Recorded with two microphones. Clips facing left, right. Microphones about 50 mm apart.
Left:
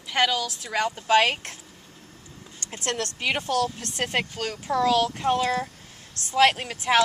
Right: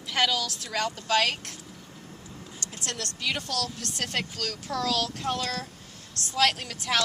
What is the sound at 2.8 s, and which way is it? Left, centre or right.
Speech, left.